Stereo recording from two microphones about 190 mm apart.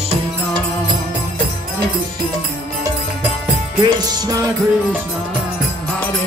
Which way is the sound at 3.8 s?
20° right (ahead or behind).